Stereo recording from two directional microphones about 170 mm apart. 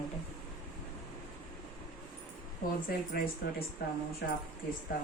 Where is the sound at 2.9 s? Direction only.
60° left (ahead or behind).